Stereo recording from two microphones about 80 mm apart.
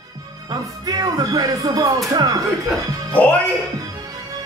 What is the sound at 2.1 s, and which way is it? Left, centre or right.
Speech, right.